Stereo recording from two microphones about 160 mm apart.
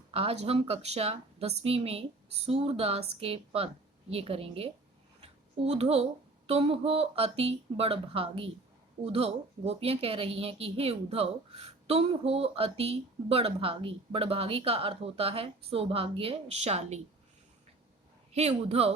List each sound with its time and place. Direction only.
0.1 s speech: 40° right (ahead or behind)
5.2 s a sound: 40° right (ahead or behind)
6.5 s speech: 40° right (ahead or behind)
18.3 s speech: 40° right (ahead or behind)